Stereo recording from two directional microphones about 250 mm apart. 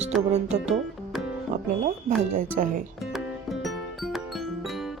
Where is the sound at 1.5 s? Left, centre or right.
Right.